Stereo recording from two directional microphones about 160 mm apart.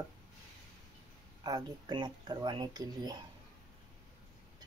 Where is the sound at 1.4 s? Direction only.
25° right (ahead or behind).